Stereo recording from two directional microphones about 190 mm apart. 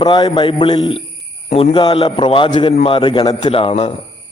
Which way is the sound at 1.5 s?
40° left (ahead or behind).